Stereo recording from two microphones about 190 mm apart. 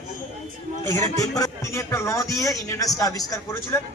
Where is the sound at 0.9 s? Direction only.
20° left (ahead or behind).